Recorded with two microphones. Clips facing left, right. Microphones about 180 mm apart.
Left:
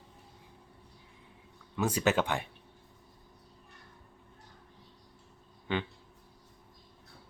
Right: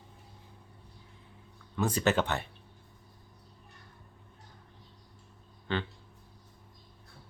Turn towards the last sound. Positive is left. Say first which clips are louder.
# even
turn(degrees=15)  # may be behind; listen again after turning